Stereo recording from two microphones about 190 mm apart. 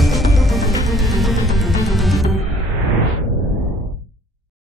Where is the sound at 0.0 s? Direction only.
Centre (ahead or behind).